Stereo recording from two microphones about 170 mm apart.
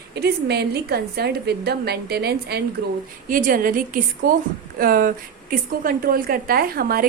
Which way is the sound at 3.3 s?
55° right (ahead or behind).